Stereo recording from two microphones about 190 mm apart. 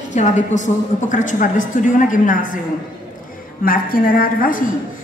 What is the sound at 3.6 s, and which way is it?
A woman's voice, 50° left (ahead or behind).